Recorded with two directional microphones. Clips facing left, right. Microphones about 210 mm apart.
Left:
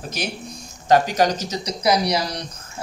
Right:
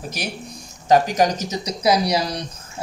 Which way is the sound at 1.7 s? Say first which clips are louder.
Right 1 dB; 25° right (ahead or behind).